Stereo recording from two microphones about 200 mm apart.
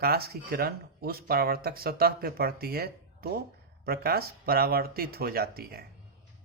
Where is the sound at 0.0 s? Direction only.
50° right (ahead or behind).